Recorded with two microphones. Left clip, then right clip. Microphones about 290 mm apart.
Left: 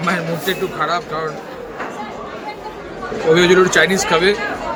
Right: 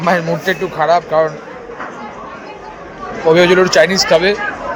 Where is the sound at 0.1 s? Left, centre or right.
Centre.